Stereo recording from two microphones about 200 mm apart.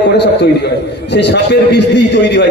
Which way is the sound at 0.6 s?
60° left (ahead or behind).